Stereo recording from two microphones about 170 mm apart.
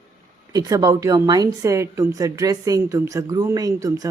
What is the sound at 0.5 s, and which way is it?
Speech, 20° right (ahead or behind).